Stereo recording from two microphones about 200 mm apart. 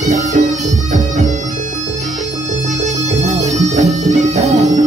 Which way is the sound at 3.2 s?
35° right (ahead or behind).